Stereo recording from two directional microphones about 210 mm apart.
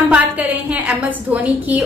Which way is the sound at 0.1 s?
5° right (ahead or behind).